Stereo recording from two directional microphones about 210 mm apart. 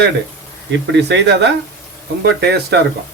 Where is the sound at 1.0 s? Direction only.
55° right (ahead or behind).